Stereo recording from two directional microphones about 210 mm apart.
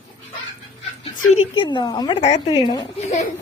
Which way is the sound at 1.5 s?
25° left (ahead or behind).